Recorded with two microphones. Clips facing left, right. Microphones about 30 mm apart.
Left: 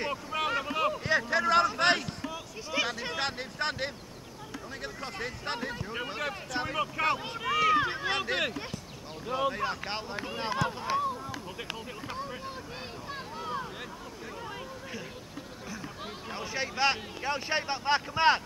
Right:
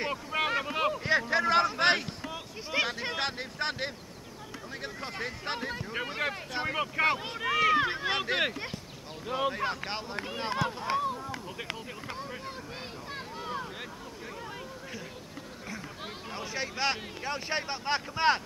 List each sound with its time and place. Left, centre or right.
0.0 s boat: centre
0.4 s boat: right
1.0 s a sound: centre
2.3 s a sound: right
3.2 s a sound: centre
4.8 s speech: centre
6.1 s speech: centre
7.4 s speech: right
7.7 s speech: centre
12.1 s speech: centre
13.1 s boat: centre
16.3 s speech: centre